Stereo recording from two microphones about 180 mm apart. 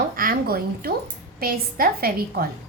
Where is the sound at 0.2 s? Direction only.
55° right (ahead or behind).